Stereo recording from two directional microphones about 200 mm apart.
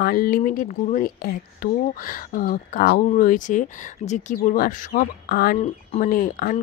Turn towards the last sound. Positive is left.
turn(degrees=45)  # may be behind; listen again after turning